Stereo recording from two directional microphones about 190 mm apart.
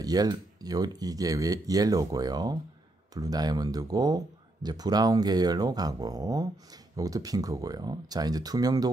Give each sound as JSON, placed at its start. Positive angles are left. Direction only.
{"t": 0.0, "sound": "speech", "side_deg": -20}